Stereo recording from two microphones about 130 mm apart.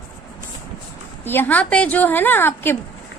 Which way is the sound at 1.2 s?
15° left (ahead or behind).